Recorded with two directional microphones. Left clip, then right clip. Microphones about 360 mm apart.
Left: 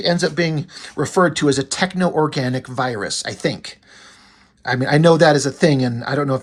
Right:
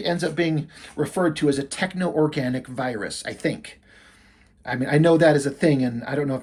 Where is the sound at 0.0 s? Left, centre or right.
Centre.